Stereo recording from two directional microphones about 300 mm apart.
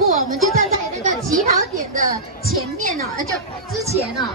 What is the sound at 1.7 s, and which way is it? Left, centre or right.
Speech, right.